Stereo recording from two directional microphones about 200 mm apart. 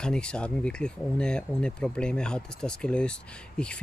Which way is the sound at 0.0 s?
5° left (ahead or behind).